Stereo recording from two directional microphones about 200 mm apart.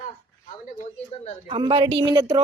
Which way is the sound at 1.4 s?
25° right (ahead or behind).